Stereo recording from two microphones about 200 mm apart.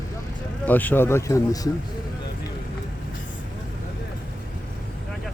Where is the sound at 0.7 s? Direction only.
10° left (ahead or behind).